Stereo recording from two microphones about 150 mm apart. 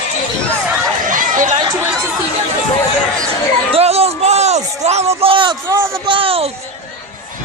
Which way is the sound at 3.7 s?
45° right (ahead or behind).